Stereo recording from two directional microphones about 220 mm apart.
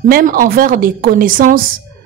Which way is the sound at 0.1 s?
40° right (ahead or behind).